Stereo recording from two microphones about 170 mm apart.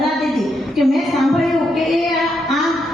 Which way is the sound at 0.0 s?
Centre (ahead or behind).